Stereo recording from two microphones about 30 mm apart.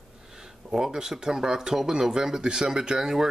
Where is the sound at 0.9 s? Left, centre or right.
Right.